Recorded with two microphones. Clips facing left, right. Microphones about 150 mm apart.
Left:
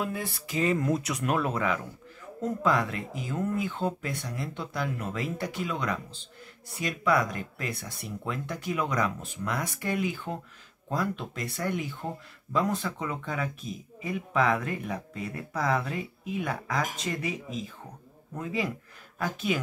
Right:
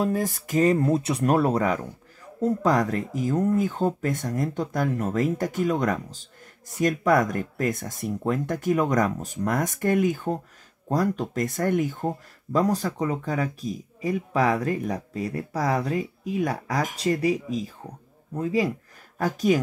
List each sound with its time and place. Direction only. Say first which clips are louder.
0.0 s speech: right 8 dB; 40° right (ahead or behind)